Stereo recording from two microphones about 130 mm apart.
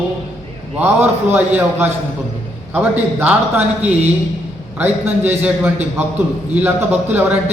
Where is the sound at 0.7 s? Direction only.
15° right (ahead or behind).